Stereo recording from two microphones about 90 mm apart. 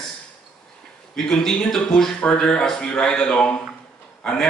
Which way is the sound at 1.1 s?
5° left (ahead or behind).